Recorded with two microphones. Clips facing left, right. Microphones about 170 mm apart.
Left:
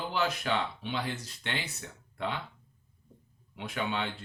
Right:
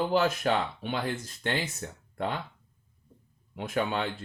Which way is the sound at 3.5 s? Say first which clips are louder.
Right 4 dB; 45° right (ahead or behind).